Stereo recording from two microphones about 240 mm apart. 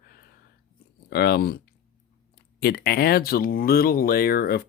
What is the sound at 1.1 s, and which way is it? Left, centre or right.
Speech, left.